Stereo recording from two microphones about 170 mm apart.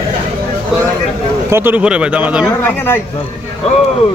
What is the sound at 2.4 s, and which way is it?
Speech, 15° left (ahead or behind).